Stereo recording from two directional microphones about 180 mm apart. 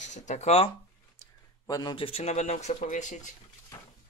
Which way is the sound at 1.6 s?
20° left (ahead or behind).